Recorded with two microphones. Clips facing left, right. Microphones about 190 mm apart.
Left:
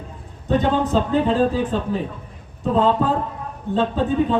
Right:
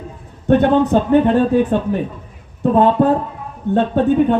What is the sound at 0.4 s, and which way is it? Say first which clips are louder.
A man's voice: right 7 dB; 60° right (ahead or behind).